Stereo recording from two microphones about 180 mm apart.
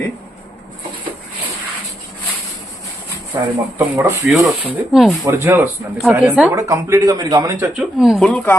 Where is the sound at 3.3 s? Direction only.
20° right (ahead or behind).